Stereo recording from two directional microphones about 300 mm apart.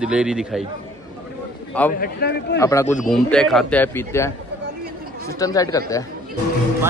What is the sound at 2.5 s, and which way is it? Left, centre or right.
A man's voice, centre.